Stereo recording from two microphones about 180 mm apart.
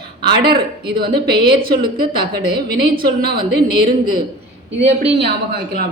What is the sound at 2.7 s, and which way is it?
Speech, 55° right (ahead or behind).